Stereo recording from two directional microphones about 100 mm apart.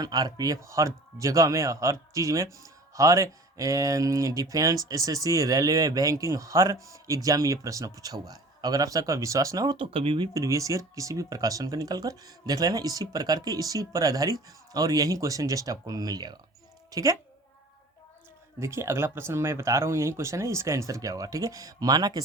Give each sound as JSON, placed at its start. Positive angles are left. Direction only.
{"t": 0.0, "sound": "speech", "side_deg": -40}
{"t": 9.7, "sound": "speech", "side_deg": -65}
{"t": 10.3, "sound": "speech", "side_deg": -30}
{"t": 16.9, "sound": "speech", "side_deg": -35}
{"t": 18.6, "sound": "speech", "side_deg": -25}